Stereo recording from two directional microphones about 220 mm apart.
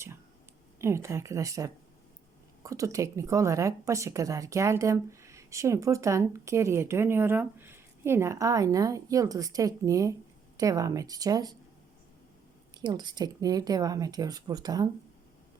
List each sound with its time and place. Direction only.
0.8 s a woman's voice: 10° right (ahead or behind)
12.7 s a woman's voice: 20° right (ahead or behind)